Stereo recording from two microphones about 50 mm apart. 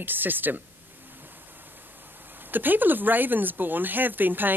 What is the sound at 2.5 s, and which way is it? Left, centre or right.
Speech, right.